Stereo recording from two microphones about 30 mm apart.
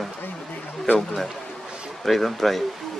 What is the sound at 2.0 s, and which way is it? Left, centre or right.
Speech, centre.